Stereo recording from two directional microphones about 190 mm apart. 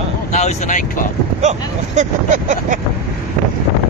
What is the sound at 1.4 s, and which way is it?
Speech, 40° right (ahead or behind).